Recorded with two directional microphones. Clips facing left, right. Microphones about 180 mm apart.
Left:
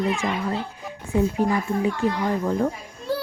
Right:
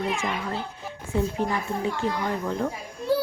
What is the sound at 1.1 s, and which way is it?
Speech, 10° left (ahead or behind).